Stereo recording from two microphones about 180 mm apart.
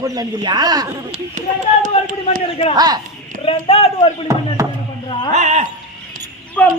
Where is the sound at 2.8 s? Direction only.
20° right (ahead or behind).